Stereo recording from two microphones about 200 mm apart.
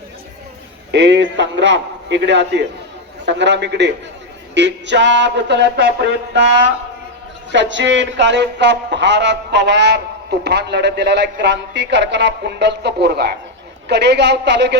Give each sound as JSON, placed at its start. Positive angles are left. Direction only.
{"t": 0.9, "sound": "speech", "side_deg": -60}